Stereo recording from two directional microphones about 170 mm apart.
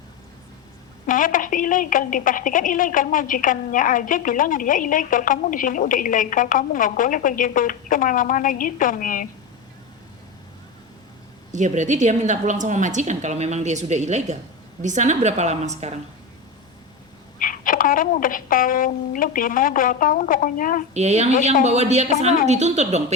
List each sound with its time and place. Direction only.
1.0 s a woman's voice: 50° left (ahead or behind)
11.5 s a woman's voice: 45° right (ahead or behind)
17.4 s a woman's voice: 50° left (ahead or behind)
20.9 s a woman's voice: 40° right (ahead or behind)